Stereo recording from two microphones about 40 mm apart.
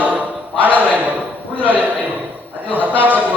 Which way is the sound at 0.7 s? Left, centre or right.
Right.